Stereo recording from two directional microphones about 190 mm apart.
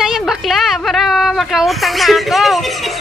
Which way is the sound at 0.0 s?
Centre (ahead or behind).